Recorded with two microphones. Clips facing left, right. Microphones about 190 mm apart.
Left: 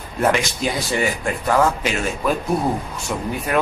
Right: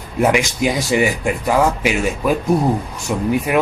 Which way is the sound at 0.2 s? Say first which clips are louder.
Right 4 dB; 15° right (ahead or behind).